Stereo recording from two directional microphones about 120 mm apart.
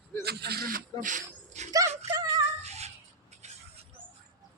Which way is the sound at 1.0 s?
80° right.